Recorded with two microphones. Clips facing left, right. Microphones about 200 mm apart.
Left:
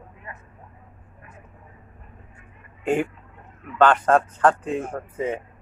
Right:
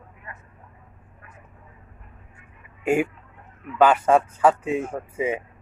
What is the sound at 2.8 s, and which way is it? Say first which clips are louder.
Speech: right 1 dB; 10° right (ahead or behind).